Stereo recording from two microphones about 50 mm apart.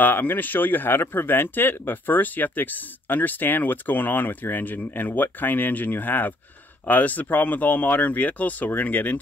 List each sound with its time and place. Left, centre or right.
0.0 s speech: left